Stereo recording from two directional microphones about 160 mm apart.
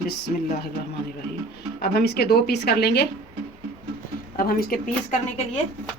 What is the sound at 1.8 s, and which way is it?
Speech, 80° left.